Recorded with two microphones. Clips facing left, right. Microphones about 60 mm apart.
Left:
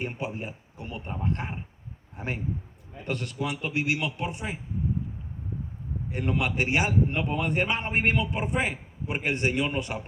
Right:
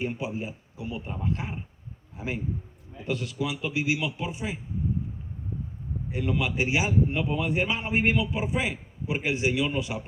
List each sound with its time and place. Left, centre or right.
0.2 s a sound: left
1.2 s a man's voice: left
6.1 s a man's voice: left